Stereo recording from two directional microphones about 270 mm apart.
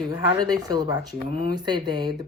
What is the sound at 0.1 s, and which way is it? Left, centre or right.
Speech, centre.